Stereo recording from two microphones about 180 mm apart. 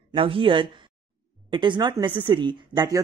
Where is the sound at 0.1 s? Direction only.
30° right (ahead or behind).